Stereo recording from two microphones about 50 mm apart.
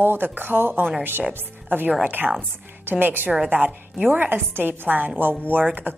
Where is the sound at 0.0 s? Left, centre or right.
Right.